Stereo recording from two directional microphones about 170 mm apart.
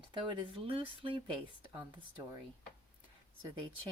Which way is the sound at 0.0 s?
30° right (ahead or behind).